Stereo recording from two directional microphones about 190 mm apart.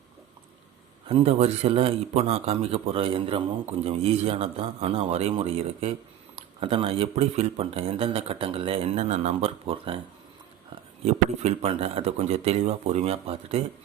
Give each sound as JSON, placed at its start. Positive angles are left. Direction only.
{"t": 1.0, "sound": "a man's voice", "side_deg": -30}
{"t": 11.0, "sound": "a man's voice", "side_deg": -35}